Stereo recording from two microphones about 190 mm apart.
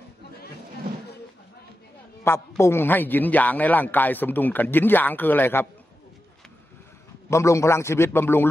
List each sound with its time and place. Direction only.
2.2 s a man's voice: 15° left (ahead or behind)
7.2 s a man's voice: 15° left (ahead or behind)